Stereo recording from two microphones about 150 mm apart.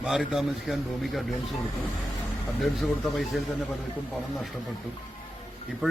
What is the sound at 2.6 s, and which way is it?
Speech, centre (ahead or behind).